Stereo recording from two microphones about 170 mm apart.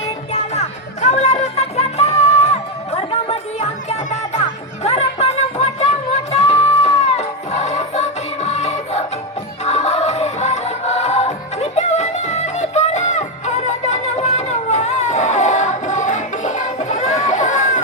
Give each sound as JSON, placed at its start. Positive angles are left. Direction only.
{"t": 0.5, "sound": "music", "side_deg": 40}
{"t": 4.4, "sound": "music", "side_deg": 40}